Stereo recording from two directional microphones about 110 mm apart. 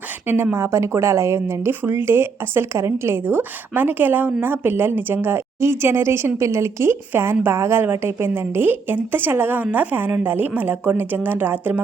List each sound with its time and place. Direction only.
0.3 s speech: 20° right (ahead or behind)